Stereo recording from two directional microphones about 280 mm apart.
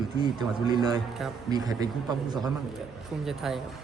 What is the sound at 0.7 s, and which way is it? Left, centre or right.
Speech, centre.